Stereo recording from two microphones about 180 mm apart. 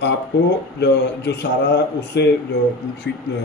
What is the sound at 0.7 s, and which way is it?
A man's voice, 70° left (ahead or behind).